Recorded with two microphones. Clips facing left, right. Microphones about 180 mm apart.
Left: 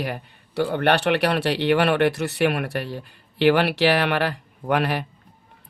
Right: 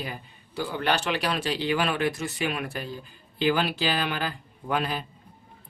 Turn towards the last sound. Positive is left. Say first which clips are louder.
# left 6 dB
turn(degrees=70)  # may be behind; listen again after turning